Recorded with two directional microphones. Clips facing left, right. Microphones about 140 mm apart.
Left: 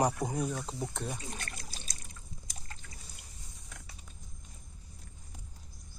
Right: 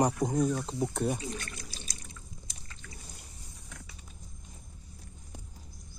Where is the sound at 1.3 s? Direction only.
40° left (ahead or behind).